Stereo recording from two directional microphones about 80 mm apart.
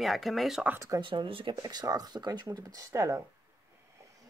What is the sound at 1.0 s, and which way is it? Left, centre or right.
Speech, right.